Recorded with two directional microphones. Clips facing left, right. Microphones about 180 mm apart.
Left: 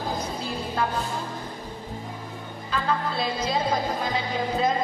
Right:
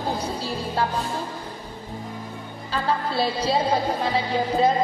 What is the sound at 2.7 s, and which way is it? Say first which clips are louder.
Music: right 2 dB; 30° right (ahead or behind).